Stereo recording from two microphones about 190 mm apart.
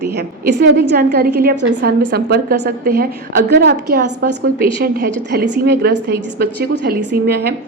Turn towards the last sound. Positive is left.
turn(degrees=-60)  # may be behind; listen again after turning